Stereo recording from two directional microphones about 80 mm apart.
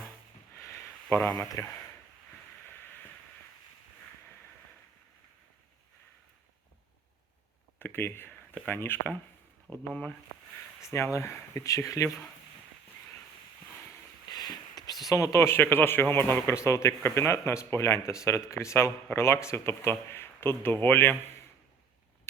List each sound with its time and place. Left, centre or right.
0.5 s a sound: left
1.6 s speech: left
7.8 s speech: left
10.8 s speech: left
14.3 s a sound: left
15.0 s a man's voice: left